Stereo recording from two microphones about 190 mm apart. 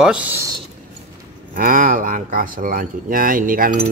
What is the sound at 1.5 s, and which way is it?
Speech, 45° right (ahead or behind).